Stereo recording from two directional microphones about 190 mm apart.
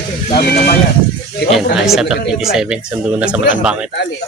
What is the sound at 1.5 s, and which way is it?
Speech, centre (ahead or behind).